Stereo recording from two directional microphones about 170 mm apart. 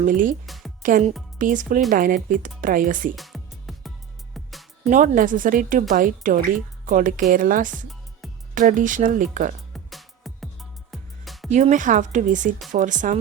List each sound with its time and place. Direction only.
0.0 s speech: 50° right (ahead or behind)
0.4 s speech: centre (ahead or behind)
0.8 s speech: 50° right (ahead or behind)
3.2 s music: centre (ahead or behind)
4.9 s speech: 50° right (ahead or behind)
8.2 s music: centre (ahead or behind)
8.5 s speech: 50° right (ahead or behind)
9.7 s music: centre (ahead or behind)
11.5 s speech: 45° right (ahead or behind)